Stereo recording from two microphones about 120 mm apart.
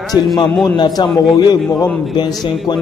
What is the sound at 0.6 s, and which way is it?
Speech, 35° left (ahead or behind).